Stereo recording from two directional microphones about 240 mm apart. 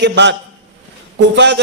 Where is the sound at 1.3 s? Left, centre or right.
Right.